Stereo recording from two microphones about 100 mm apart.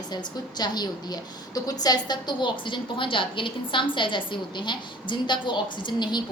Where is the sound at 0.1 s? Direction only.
45° left (ahead or behind).